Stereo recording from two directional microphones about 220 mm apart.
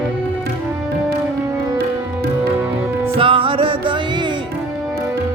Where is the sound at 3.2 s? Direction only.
25° right (ahead or behind).